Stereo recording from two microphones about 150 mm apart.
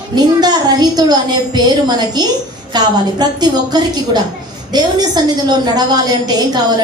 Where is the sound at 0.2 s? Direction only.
25° right (ahead or behind).